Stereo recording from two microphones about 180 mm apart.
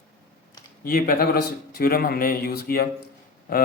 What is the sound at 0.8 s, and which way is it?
A man's voice, 55° left (ahead or behind).